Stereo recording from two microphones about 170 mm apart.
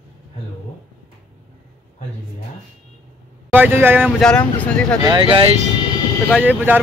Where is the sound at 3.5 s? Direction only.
10° right (ahead or behind).